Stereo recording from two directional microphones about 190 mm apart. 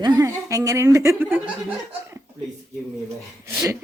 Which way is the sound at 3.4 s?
15° right (ahead or behind).